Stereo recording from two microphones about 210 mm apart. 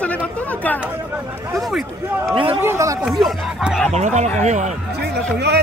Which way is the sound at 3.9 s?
35° right (ahead or behind).